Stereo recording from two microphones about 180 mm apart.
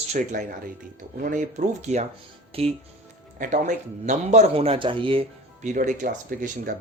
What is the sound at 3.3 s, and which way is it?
Speech, 45° right (ahead or behind).